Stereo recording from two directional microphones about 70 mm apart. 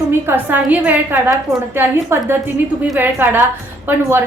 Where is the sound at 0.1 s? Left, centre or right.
Right.